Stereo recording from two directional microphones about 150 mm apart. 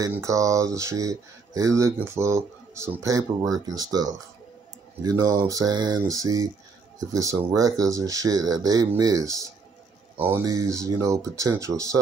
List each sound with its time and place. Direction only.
0.1 s speech: 20° right (ahead or behind)